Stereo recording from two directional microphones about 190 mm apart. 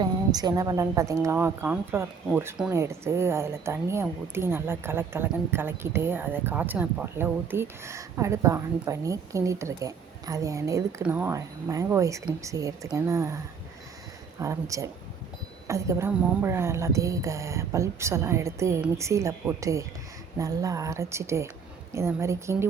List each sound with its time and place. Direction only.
0.0 s a woman's voice: 20° right (ahead or behind)